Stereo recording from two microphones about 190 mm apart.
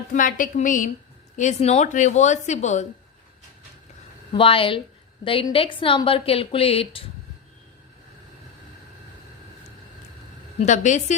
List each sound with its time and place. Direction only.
0.1 s a woman's voice: 45° left (ahead or behind)
4.3 s a woman's voice: 25° left (ahead or behind)
10.6 s a woman's voice: 40° left (ahead or behind)